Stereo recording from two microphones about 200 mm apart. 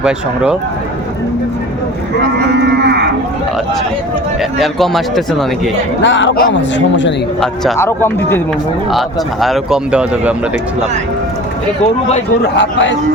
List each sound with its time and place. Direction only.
2.6 s cattle: 55° right (ahead or behind)
4.6 s speech: centre (ahead or behind)
6.0 s speech: 65° left (ahead or behind)
7.4 s speech: centre (ahead or behind)
7.8 s speech: 10° left (ahead or behind)
8.9 s speech: centre (ahead or behind)
12.5 s speech: 65° left (ahead or behind)